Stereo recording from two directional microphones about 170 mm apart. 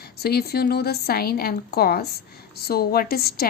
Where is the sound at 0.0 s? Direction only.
70° left (ahead or behind).